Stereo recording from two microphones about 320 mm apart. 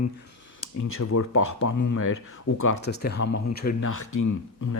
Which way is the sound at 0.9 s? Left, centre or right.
Left.